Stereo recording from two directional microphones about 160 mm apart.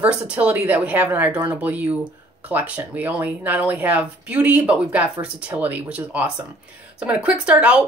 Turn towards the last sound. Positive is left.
turn(degrees=-10)  # may be behind; listen again after turning